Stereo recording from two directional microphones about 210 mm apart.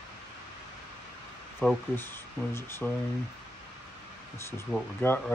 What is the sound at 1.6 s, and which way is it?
Speech, 5° left (ahead or behind).